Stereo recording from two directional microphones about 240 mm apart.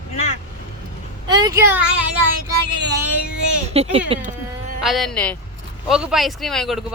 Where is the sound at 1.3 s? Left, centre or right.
Centre.